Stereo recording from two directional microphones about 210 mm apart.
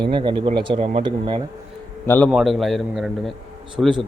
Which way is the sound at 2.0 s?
10° left (ahead or behind).